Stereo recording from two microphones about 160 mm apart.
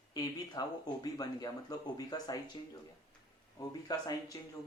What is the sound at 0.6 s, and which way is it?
Speech, 25° left (ahead or behind).